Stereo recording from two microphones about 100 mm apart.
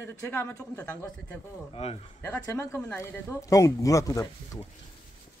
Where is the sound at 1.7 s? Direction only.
90° left.